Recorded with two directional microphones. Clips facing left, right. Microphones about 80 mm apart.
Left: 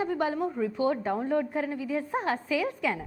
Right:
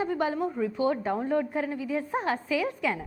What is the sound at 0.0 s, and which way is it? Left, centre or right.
A woman's voice, right.